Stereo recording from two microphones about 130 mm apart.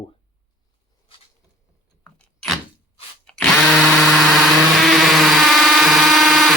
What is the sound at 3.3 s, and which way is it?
Drill, 5° left (ahead or behind).